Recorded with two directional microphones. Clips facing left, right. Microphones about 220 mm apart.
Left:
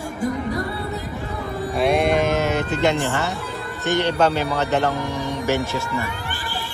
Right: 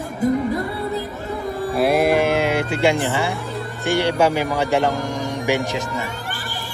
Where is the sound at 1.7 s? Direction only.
5° right (ahead or behind).